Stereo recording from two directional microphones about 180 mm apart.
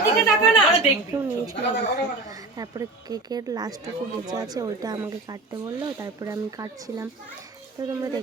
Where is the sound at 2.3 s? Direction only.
20° right (ahead or behind).